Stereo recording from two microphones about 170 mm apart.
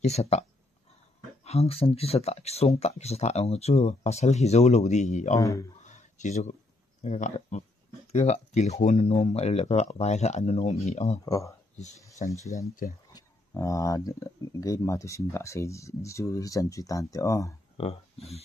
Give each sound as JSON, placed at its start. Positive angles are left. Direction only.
{"t": 0.0, "sound": "speech", "side_deg": 40}
{"t": 5.4, "sound": "speech", "side_deg": 20}
{"t": 5.8, "sound": "a sound", "side_deg": 45}
{"t": 7.0, "sound": "speech", "side_deg": 45}
{"t": 11.2, "sound": "speech", "side_deg": 20}
{"t": 12.2, "sound": "speech", "side_deg": 45}
{"t": 13.5, "sound": "speech", "side_deg": 20}
{"t": 17.7, "sound": "speech", "side_deg": 35}